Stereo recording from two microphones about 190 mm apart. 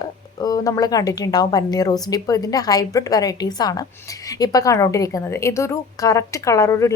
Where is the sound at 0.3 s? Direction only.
20° left (ahead or behind).